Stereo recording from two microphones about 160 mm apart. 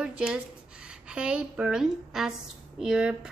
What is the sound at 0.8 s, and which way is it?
A woman's voice, 5° right (ahead or behind).